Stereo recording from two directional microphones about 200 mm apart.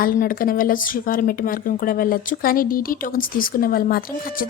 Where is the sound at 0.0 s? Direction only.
45° left (ahead or behind).